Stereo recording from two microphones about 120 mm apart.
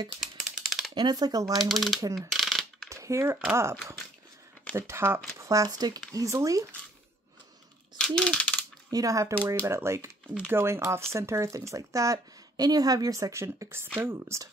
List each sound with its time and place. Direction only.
0.2 s typing: 5° right (ahead or behind)
0.9 s speech: 35° right (ahead or behind)
1.4 s speech: centre (ahead or behind)
2.1 s coin: centre (ahead or behind)
2.9 s speech: 25° right (ahead or behind)
4.7 s speech: 20° right (ahead or behind)
8.0 s a sound: 5° left (ahead or behind)
8.9 s speech: 25° right (ahead or behind)